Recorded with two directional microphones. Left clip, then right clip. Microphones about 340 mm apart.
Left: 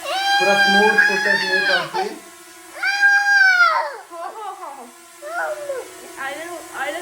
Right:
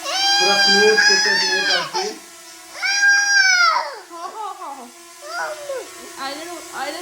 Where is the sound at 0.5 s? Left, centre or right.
Right.